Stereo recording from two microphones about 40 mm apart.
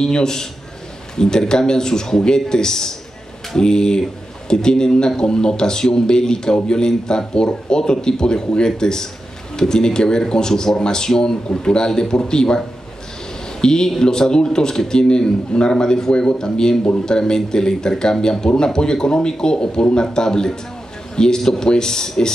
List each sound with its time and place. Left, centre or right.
0.0 s speech: centre